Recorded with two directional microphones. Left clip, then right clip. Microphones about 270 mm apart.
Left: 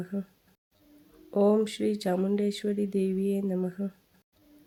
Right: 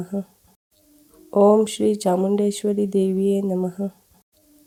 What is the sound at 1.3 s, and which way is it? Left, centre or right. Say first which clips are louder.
Speech: right 9 dB; centre.